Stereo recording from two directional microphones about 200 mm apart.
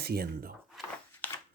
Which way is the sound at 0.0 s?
50° right (ahead or behind).